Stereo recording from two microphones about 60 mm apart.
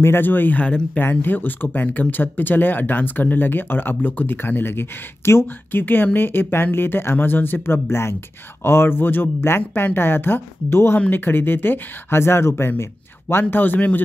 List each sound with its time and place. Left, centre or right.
0.0 s speech: left
9.6 s speech: left
9.9 s speech: left